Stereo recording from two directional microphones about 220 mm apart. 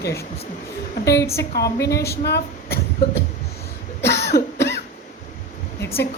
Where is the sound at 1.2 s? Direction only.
15° left (ahead or behind).